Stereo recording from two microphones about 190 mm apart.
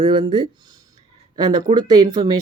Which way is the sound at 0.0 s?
25° right (ahead or behind).